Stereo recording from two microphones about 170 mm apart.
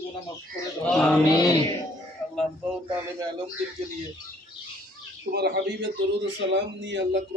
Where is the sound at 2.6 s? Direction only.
5° right (ahead or behind).